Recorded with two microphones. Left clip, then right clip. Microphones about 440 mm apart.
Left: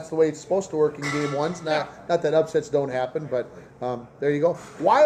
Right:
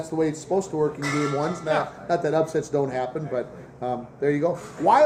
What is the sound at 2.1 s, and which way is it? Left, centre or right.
A man's voice, centre.